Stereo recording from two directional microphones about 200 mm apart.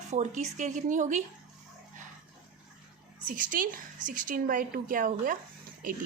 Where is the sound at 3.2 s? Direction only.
45° right (ahead or behind).